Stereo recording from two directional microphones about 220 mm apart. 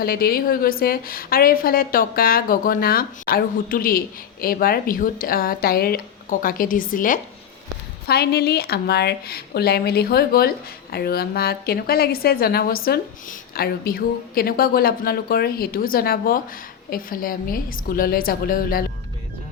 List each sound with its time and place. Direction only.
0.0 s a woman's voice: 45° left (ahead or behind)